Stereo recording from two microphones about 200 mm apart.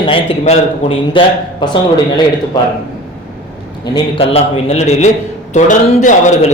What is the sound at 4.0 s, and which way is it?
A man's voice, 30° left (ahead or behind).